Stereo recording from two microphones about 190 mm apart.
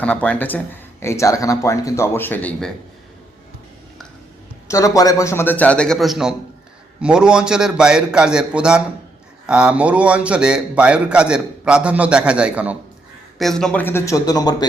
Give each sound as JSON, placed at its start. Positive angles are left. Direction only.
{"t": 0.0, "sound": "speech", "side_deg": 5}
{"t": 4.7, "sound": "a man's voice", "side_deg": 15}